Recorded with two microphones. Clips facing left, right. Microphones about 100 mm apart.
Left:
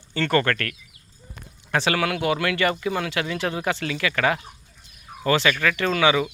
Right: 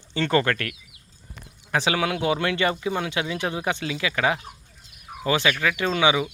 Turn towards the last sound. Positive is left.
turn(degrees=-20)  # may be behind; listen again after turning